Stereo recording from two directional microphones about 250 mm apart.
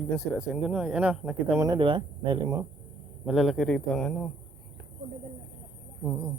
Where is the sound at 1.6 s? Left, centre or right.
Centre.